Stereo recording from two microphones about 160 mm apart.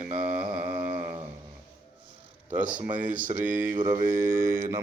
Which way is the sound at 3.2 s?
55° right (ahead or behind).